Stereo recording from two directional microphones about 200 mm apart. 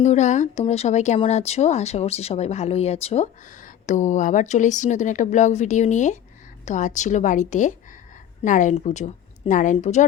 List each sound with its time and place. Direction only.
0.0 s speech: 35° left (ahead or behind)